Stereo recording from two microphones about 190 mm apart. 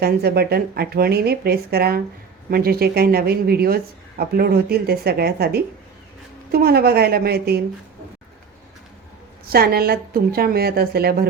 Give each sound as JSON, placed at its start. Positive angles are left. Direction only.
{"t": 0.0, "sound": "speech", "side_deg": -55}
{"t": 9.5, "sound": "a woman's voice", "side_deg": -55}